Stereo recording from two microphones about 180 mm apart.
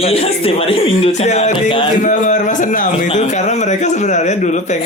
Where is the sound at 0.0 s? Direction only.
35° left (ahead or behind).